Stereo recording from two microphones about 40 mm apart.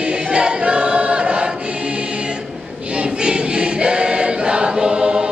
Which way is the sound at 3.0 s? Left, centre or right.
Right.